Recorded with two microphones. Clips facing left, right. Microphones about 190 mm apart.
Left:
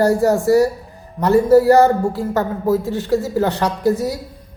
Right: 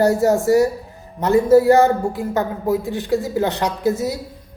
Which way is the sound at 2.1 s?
15° right (ahead or behind).